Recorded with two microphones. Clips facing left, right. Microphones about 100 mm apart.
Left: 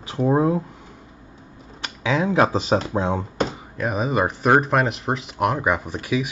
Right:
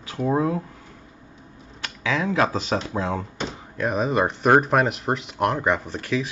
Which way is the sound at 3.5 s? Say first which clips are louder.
Even; 5° left (ahead or behind).